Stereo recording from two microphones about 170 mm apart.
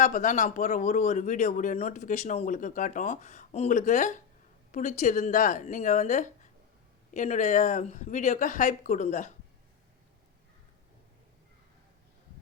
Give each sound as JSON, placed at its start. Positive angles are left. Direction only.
{"t": 0.0, "sound": "speech", "side_deg": 50}